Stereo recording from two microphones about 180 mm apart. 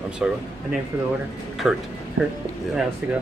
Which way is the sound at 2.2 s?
90° right.